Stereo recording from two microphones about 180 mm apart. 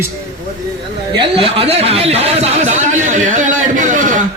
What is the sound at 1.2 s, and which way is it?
Speech, 30° right (ahead or behind).